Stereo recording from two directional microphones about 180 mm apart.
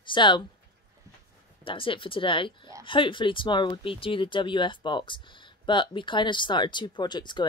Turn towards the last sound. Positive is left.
turn(degrees=25)  # may be behind; listen again after turning